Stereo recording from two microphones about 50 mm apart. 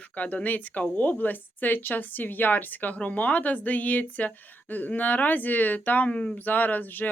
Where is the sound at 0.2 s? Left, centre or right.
Left.